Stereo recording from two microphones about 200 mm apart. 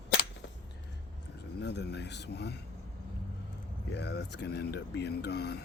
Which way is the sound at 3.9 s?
60° left (ahead or behind).